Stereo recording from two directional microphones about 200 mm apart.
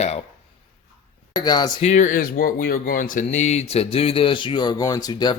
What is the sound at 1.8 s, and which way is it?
Speech, 35° left (ahead or behind).